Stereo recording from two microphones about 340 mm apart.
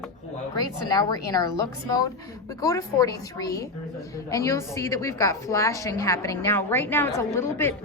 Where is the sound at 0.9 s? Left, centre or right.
Centre.